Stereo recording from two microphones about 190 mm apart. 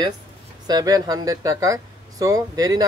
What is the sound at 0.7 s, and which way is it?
Speech, 20° right (ahead or behind).